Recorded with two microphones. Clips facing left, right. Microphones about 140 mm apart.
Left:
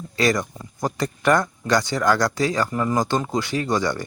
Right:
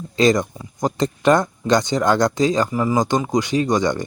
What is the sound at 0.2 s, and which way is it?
Speech, 20° right (ahead or behind).